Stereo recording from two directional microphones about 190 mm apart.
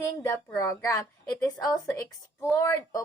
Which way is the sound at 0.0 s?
15° left (ahead or behind).